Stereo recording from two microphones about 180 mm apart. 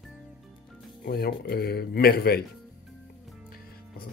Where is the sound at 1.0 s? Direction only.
60° left (ahead or behind).